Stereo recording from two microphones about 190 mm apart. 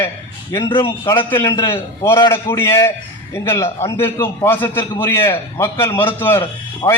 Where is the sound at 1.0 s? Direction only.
15° left (ahead or behind).